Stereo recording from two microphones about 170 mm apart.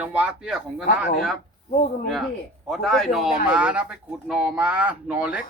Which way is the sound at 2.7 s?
Centre (ahead or behind).